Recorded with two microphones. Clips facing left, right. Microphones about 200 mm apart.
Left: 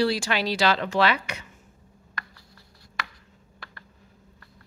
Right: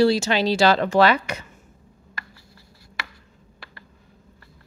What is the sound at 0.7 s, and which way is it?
Speech, 40° right (ahead or behind).